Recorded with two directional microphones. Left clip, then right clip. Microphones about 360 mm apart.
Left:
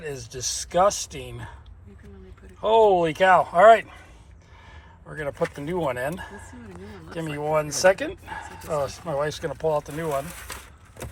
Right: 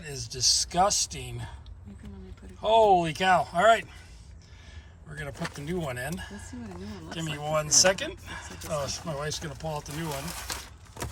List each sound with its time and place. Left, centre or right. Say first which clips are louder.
0.0 s speech: right 3 dB; centre
2.6 s speech: left 3 dB; centre
5.1 s speech: left 9 dB; centre